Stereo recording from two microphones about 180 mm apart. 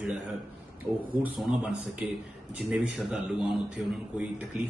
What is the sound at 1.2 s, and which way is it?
A man's voice, 5° right (ahead or behind).